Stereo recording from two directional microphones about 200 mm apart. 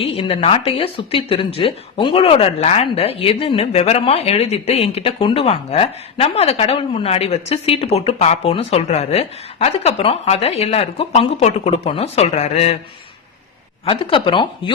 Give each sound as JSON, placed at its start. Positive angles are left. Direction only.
{"t": 0.0, "sound": "speech", "side_deg": 30}
{"t": 13.8, "sound": "speech", "side_deg": 25}